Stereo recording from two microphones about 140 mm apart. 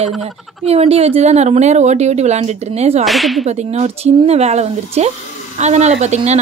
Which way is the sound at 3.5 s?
50° right (ahead or behind).